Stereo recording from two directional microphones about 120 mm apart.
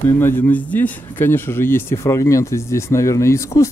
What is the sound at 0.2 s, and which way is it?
A man's voice, 15° left (ahead or behind).